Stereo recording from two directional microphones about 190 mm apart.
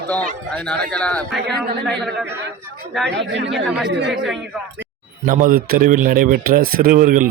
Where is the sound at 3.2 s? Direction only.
70° right (ahead or behind).